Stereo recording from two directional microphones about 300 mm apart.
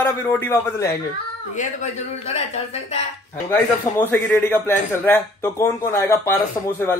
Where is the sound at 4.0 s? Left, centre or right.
Centre.